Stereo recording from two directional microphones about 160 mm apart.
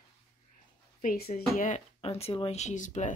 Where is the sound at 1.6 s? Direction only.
45° left (ahead or behind).